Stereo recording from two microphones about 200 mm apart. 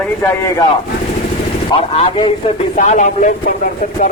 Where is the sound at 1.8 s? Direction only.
30° left (ahead or behind).